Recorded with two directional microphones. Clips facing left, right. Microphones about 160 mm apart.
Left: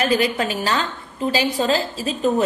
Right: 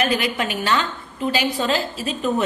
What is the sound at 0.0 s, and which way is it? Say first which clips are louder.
A woman's voice: left 2 dB; 35° left (ahead or behind).